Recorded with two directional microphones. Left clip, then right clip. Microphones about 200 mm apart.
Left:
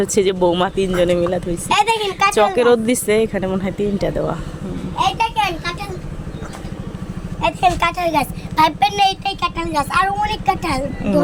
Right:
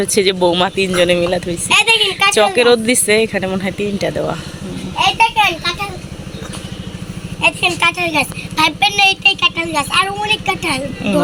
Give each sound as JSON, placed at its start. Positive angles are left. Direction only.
{"t": 0.0, "sound": "speech", "side_deg": 5}
{"t": 1.7, "sound": "a woman's voice", "side_deg": 25}
{"t": 2.0, "sound": "speech", "side_deg": 5}
{"t": 4.9, "sound": "a sound", "side_deg": -20}
{"t": 7.8, "sound": "speech", "side_deg": 20}